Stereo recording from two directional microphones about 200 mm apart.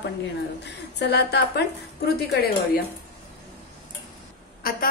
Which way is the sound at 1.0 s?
55° left (ahead or behind).